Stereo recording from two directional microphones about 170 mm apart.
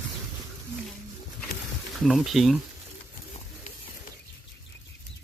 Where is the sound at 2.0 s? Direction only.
Centre (ahead or behind).